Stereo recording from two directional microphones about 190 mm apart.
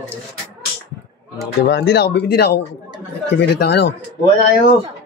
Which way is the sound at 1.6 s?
60° left (ahead or behind).